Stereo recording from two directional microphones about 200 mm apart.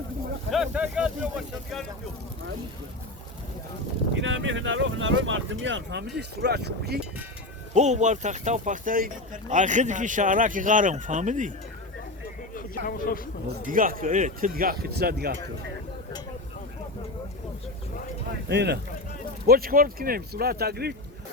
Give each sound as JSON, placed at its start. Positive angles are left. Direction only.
{"t": 0.5, "sound": "speech", "side_deg": -5}
{"t": 4.1, "sound": "speech", "side_deg": -70}
{"t": 7.7, "sound": "speech", "side_deg": -35}
{"t": 12.5, "sound": "speech", "side_deg": 45}
{"t": 13.5, "sound": "speech", "side_deg": -45}
{"t": 18.4, "sound": "speech", "side_deg": -55}